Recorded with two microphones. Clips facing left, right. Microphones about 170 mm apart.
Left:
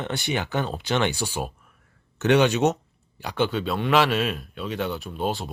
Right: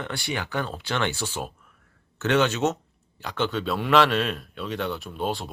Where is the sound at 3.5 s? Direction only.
Centre (ahead or behind).